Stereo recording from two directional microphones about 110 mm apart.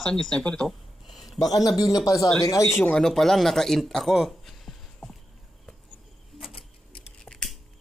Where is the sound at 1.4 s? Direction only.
35° left (ahead or behind).